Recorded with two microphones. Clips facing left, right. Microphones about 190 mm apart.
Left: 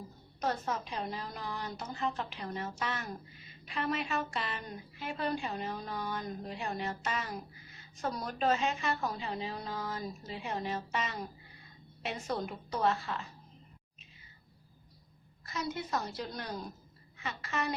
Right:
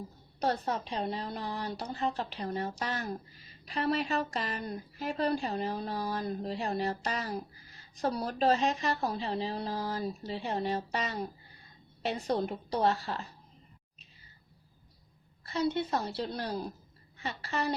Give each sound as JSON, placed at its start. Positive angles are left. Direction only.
{"t": 0.3, "sound": "speech", "side_deg": -35}
{"t": 15.4, "sound": "speech", "side_deg": -30}